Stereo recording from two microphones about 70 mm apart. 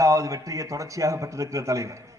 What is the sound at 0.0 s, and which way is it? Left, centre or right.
A man's voice, right.